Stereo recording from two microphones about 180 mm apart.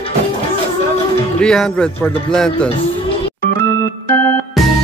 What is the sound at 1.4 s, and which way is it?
Speech, 5° left (ahead or behind).